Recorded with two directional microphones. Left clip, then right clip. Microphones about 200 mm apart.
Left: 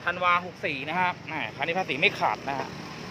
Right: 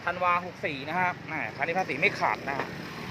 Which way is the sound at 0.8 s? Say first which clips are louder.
Left 1 dB; 15° left (ahead or behind).